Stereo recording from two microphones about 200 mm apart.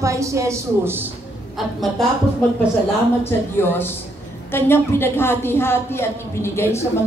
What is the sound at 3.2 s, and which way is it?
A woman's voice, 10° left (ahead or behind).